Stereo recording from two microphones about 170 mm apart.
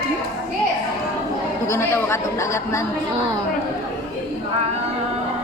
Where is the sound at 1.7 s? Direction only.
15° left (ahead or behind).